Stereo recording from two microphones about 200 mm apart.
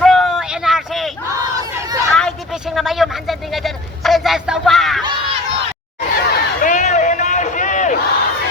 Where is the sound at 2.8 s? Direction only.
Centre (ahead or behind).